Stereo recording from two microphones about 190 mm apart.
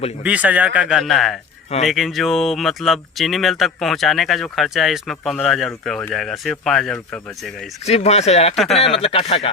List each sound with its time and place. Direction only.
0.2 s a man's voice: 10° right (ahead or behind)
7.9 s speech: 35° left (ahead or behind)
8.5 s speech: centre (ahead or behind)
8.8 s speech: 30° left (ahead or behind)